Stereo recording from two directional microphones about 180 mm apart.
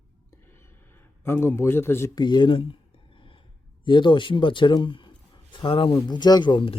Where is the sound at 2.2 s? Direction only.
25° left (ahead or behind).